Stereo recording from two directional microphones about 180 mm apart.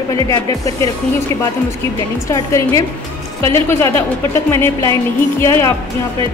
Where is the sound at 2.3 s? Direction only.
15° left (ahead or behind).